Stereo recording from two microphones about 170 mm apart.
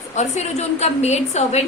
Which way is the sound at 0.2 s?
40° left (ahead or behind).